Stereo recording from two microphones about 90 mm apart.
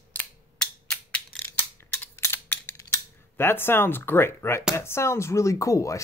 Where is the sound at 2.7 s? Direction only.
30° left (ahead or behind).